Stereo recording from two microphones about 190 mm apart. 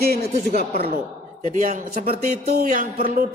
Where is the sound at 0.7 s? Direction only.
55° right (ahead or behind).